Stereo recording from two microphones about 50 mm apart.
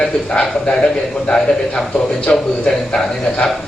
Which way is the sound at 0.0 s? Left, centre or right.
Centre.